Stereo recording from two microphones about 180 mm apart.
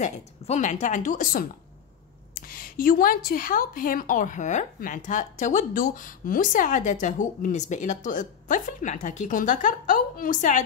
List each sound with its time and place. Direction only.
0.0 s a woman's voice: 40° left (ahead or behind)